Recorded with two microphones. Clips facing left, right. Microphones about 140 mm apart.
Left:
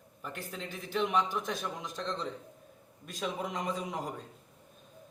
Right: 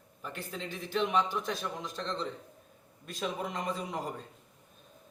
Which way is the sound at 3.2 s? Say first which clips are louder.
Even; centre (ahead or behind).